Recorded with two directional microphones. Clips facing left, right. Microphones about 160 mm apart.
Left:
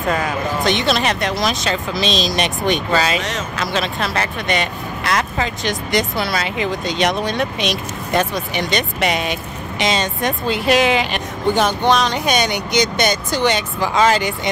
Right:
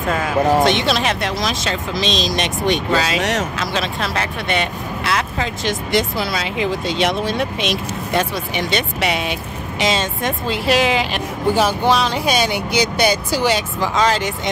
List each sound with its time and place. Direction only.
0.7 s speech: centre (ahead or behind)
3.2 s a man's voice: 70° right (ahead or behind)
3.5 s speech: centre (ahead or behind)